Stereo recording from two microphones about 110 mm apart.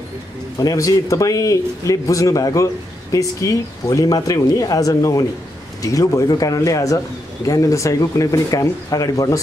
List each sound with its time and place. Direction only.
0.6 s a man's voice: 30° left (ahead or behind)